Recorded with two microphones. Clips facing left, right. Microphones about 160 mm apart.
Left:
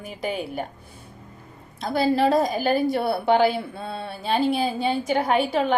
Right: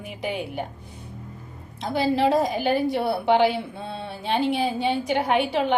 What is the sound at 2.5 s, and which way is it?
Speech, 40° left (ahead or behind).